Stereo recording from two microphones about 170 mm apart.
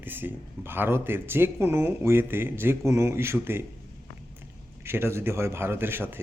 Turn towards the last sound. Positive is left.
turn(degrees=-15)  # may be behind; listen again after turning